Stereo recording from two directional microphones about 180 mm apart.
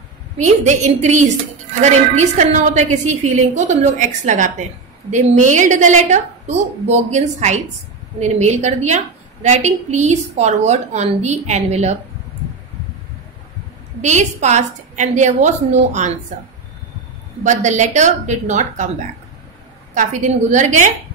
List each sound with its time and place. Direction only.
0.4 s a woman's voice: 40° right (ahead or behind)
14.0 s a woman's voice: 40° right (ahead or behind)
17.4 s a woman's voice: 40° right (ahead or behind)